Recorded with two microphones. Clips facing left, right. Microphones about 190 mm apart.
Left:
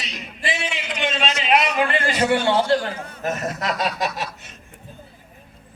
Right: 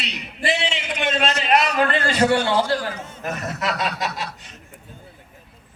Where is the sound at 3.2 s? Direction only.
40° left (ahead or behind).